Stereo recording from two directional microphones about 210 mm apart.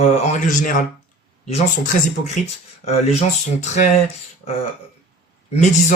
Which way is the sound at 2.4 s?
35° left (ahead or behind).